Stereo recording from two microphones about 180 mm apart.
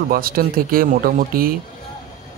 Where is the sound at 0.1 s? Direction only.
55° right (ahead or behind).